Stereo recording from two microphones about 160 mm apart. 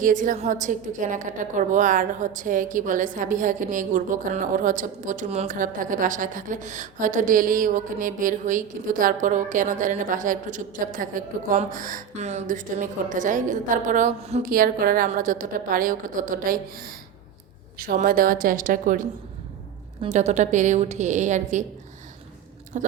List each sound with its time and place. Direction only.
0.0 s a woman's voice: 55° right (ahead or behind)
5.5 s a woman's voice: 55° right (ahead or behind)
14.5 s a woman's voice: 65° right (ahead or behind)
20.0 s a woman's voice: 45° right (ahead or behind)
22.7 s chewing: 55° right (ahead or behind)